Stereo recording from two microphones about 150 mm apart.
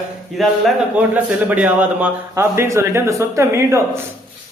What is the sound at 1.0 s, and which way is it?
A man's voice, 10° right (ahead or behind).